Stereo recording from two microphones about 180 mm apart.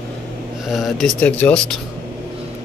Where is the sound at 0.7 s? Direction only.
Centre (ahead or behind).